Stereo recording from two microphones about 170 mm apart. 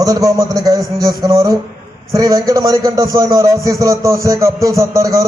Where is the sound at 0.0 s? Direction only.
20° right (ahead or behind).